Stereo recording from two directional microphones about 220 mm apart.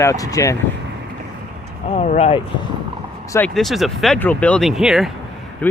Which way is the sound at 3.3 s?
5° left (ahead or behind).